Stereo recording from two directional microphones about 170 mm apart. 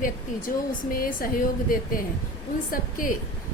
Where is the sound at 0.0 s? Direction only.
55° left (ahead or behind).